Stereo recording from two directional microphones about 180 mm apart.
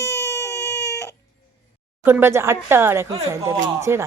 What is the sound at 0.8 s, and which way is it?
Baby cry, 70° left (ahead or behind).